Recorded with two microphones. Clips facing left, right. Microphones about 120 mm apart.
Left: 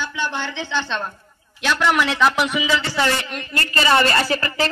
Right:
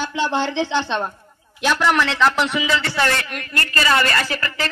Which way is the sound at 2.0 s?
10° left (ahead or behind).